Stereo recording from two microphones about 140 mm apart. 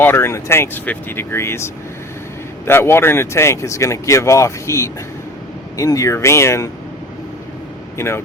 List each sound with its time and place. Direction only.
0.0 s speech: 15° left (ahead or behind)
7.9 s speech: 20° left (ahead or behind)